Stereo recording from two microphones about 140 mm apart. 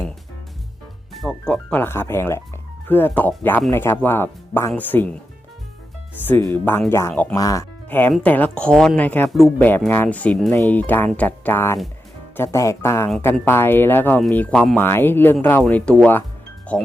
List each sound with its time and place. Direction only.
1.1 s speech: centre (ahead or behind)
1.8 s speech: 15° left (ahead or behind)
6.2 s speech: 15° left (ahead or behind)
7.3 s speech: 25° left (ahead or behind)
7.9 s speech: 15° left (ahead or behind)